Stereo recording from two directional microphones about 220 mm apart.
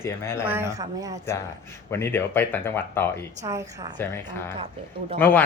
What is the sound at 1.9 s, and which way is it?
Speech, 10° left (ahead or behind).